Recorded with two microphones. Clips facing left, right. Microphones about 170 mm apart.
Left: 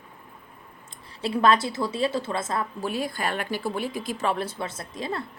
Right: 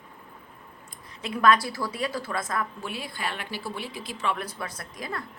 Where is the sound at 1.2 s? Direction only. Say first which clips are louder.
Left 1 dB; 30° left (ahead or behind).